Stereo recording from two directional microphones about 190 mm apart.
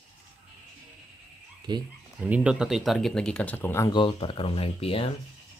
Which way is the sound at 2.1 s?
5° right (ahead or behind).